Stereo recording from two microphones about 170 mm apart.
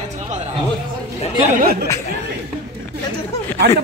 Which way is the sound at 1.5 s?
60° right (ahead or behind).